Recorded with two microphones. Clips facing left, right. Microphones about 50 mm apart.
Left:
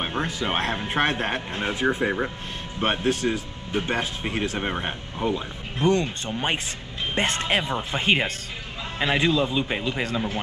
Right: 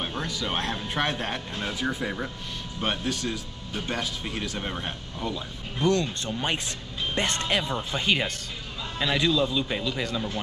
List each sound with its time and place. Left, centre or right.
0.0 s speech: left